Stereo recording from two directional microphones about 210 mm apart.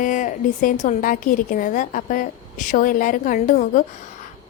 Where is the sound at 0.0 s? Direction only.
40° left (ahead or behind).